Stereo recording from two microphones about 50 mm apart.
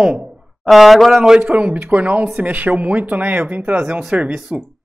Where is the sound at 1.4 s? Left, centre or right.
Right.